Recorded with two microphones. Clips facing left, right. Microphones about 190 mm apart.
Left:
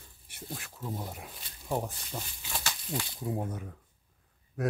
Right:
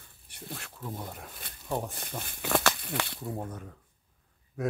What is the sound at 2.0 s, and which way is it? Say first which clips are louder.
Speech: right 2 dB; 55° right (ahead or behind).